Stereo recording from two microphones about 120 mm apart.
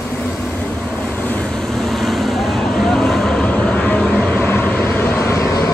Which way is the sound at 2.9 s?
5° left (ahead or behind).